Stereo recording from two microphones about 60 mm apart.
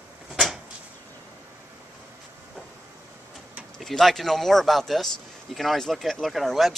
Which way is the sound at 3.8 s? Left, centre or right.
Centre.